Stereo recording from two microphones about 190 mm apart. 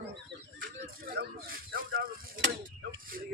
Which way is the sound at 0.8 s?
55° right (ahead or behind).